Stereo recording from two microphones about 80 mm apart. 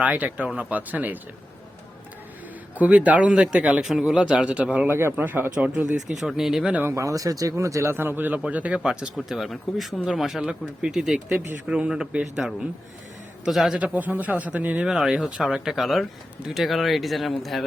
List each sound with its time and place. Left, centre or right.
0.0 s a man's voice: centre
2.7 s a man's voice: centre
6.1 s speech: centre
6.9 s a man's voice: right; by 13.7 s centre
13.7 s a man's voice: centre
14.8 s speech: centre